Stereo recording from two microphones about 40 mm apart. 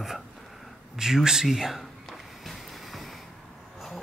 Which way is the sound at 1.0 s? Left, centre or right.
Centre.